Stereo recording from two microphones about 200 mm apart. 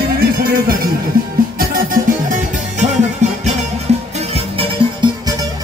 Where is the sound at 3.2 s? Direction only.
35° right (ahead or behind).